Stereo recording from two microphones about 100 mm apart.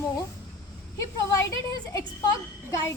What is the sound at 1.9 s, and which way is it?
A woman's voice, 30° left (ahead or behind).